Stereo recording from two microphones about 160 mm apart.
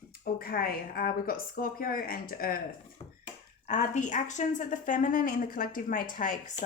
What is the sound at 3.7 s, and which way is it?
Speech, 50° left (ahead or behind).